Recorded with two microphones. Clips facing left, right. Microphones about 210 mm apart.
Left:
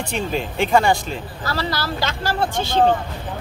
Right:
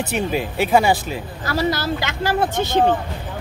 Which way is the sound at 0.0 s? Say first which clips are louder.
Right 2 dB; 5° right (ahead or behind).